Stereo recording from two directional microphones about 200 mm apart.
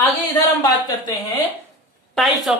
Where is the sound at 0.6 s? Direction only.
20° left (ahead or behind).